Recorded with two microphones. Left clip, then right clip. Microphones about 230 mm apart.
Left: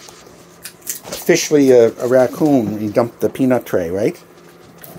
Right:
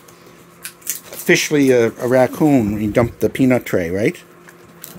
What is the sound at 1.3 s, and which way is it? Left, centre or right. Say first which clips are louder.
Speech: left 2 dB; right.